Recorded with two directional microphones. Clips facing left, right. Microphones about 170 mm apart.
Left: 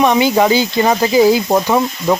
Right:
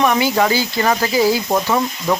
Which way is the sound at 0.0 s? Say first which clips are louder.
Left 4 dB; 20° left (ahead or behind).